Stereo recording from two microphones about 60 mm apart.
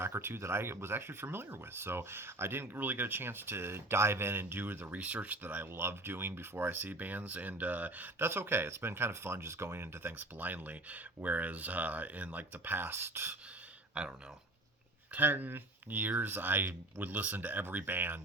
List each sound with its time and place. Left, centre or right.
0.2 s speech: right
4.9 s speech: right
5.7 s speech: right
8.2 s speech: right
10.2 s speech: right
12.9 s speech: right
14.0 s speech: centre
15.1 s speech: right